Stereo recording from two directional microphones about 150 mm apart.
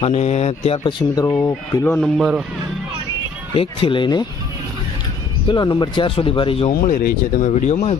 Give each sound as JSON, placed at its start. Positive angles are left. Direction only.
{"t": 0.0, "sound": "speech", "side_deg": 45}
{"t": 1.5, "sound": "speech", "side_deg": 20}
{"t": 2.0, "sound": "speech", "side_deg": 0}
{"t": 3.5, "sound": "speech", "side_deg": 35}
{"t": 5.5, "sound": "speech", "side_deg": 30}
{"t": 6.8, "sound": "speech", "side_deg": 55}